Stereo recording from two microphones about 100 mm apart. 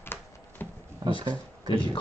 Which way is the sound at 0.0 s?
20° left (ahead or behind).